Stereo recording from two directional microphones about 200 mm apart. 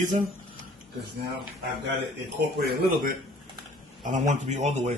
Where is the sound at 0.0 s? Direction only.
40° right (ahead or behind).